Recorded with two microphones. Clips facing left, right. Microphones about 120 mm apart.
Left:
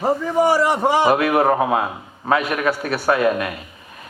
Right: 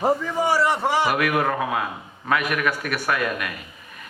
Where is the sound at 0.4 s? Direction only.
15° left (ahead or behind).